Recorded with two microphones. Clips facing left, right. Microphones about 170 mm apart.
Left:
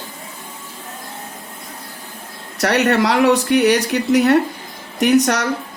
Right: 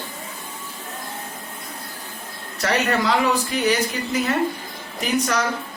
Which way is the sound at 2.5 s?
70° left (ahead or behind).